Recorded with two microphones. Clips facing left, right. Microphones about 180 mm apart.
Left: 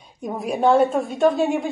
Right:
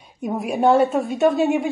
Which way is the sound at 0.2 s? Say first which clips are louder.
Right 1 dB; centre (ahead or behind).